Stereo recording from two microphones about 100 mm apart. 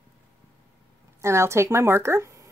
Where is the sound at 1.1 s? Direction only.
30° right (ahead or behind).